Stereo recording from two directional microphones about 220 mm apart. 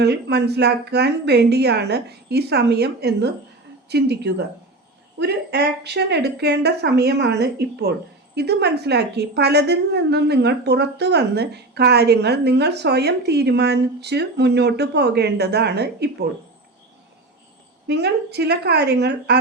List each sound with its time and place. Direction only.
0.0 s a woman's voice: 50° right (ahead or behind)
17.8 s a woman's voice: 50° right (ahead or behind)